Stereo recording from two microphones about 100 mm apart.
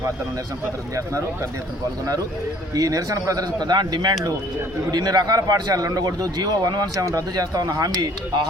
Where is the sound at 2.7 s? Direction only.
35° right (ahead or behind).